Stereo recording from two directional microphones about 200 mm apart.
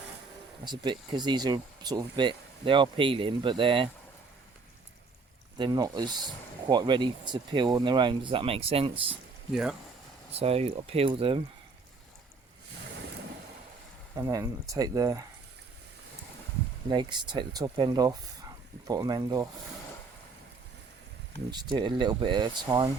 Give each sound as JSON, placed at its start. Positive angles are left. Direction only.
{"t": 0.6, "sound": "speech", "side_deg": -20}
{"t": 5.5, "sound": "speech", "side_deg": -20}
{"t": 9.5, "sound": "speech", "side_deg": -5}
{"t": 10.3, "sound": "speech", "side_deg": -30}
{"t": 14.2, "sound": "speech", "side_deg": -15}
{"t": 16.9, "sound": "speech", "side_deg": -20}
{"t": 21.5, "sound": "speech", "side_deg": -20}